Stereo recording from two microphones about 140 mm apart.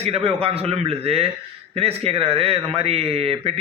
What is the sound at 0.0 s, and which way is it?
Speech, 45° right (ahead or behind).